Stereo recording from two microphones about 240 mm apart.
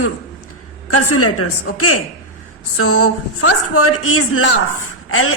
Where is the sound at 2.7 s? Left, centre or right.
Left.